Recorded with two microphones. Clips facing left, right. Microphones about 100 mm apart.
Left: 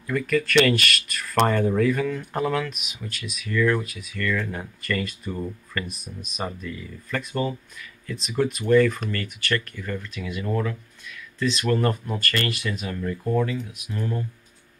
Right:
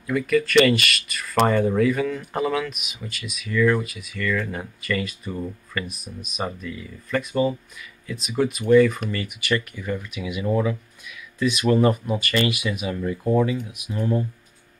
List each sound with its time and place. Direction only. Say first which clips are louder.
0.0 s speech: right 3 dB; 5° right (ahead or behind); by 14.2 s 20° right (ahead or behind)